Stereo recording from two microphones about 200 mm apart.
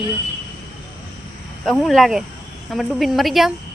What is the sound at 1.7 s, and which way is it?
Speech, centre (ahead or behind).